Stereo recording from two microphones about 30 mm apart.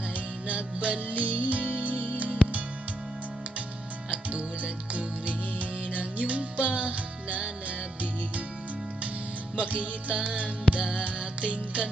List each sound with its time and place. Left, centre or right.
0.4 s music: right
4.1 s music: right
9.6 s music: right